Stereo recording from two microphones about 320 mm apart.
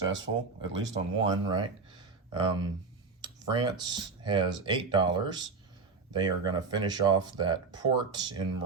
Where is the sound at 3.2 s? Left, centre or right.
Centre.